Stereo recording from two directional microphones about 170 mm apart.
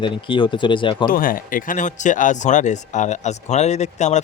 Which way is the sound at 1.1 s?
55° left (ahead or behind).